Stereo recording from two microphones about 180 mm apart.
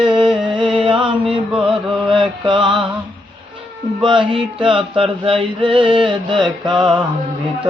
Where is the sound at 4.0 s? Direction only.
25° right (ahead or behind).